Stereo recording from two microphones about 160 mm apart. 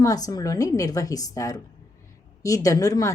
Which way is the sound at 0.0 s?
20° left (ahead or behind).